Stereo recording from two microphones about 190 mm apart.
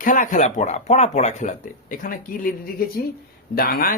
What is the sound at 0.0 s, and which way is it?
Speech, 45° left (ahead or behind).